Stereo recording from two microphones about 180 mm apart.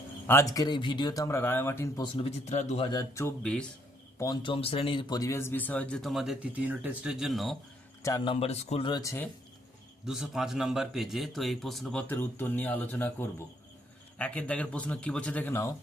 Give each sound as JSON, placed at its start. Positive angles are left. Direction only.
{"t": 0.3, "sound": "speech", "side_deg": 15}
{"t": 2.1, "sound": "a man's voice", "side_deg": 35}
{"t": 2.8, "sound": "speech", "side_deg": 20}
{"t": 3.4, "sound": "a man's voice", "side_deg": 5}
{"t": 4.2, "sound": "speech", "side_deg": 25}
{"t": 8.0, "sound": "speech", "side_deg": 20}
{"t": 8.3, "sound": "speech", "side_deg": 35}
{"t": 10.1, "sound": "a man's voice", "side_deg": 0}